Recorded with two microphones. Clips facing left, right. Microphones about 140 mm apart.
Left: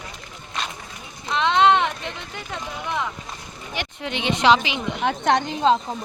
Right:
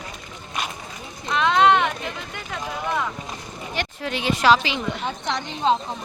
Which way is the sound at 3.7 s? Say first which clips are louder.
Right 1 dB; 15° left (ahead or behind).